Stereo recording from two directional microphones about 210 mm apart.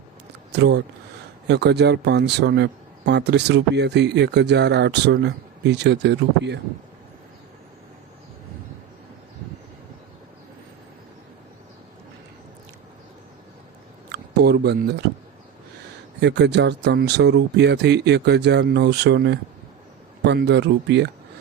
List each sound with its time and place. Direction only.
0.5 s speech: 55° right (ahead or behind)
14.1 s a sound: 50° right (ahead or behind)
16.2 s speech: 55° right (ahead or behind)